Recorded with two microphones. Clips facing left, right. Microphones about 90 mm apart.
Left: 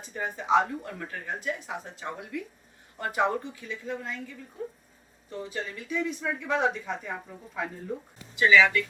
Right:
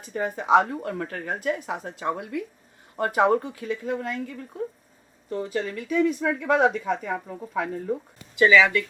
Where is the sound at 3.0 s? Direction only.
60° right (ahead or behind).